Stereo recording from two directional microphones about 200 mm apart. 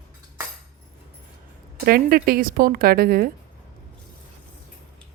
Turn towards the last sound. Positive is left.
turn(degrees=-50)  # may be behind; listen again after turning